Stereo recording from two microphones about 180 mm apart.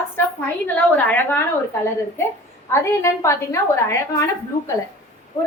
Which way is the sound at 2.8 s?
15° left (ahead or behind).